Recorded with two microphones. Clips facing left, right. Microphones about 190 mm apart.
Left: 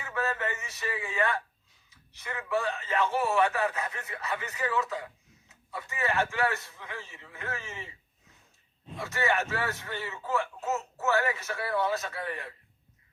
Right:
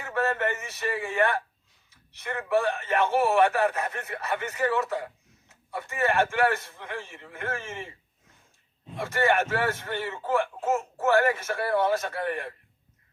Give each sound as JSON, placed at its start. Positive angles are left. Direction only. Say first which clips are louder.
{"t": 0.0, "sound": "a man's voice", "louder": "right 5 dB", "side_deg": -60}